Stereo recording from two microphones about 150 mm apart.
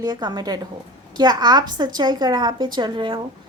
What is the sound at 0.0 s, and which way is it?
A woman's voice, 30° right (ahead or behind).